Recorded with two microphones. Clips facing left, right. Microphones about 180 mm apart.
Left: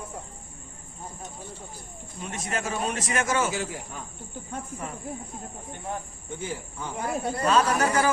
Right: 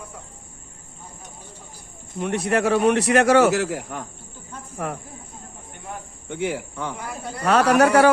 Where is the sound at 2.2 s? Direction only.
65° right (ahead or behind).